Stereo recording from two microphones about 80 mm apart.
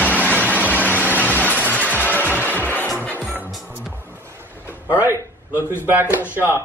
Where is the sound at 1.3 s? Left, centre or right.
Left.